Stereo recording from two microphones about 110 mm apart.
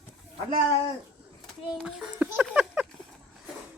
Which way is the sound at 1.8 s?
10° right (ahead or behind).